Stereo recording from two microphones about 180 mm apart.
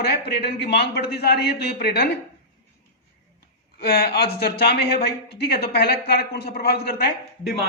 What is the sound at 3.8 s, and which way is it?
A man's voice, 60° left (ahead or behind).